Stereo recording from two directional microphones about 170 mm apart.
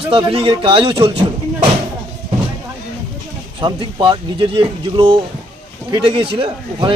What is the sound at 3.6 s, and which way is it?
Speech, 30° right (ahead or behind).